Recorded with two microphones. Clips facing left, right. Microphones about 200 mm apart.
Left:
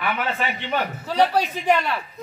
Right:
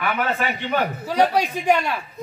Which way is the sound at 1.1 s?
15° right (ahead or behind).